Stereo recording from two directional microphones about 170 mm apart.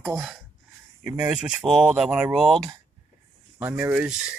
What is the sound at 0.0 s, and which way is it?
Speech, 15° right (ahead or behind).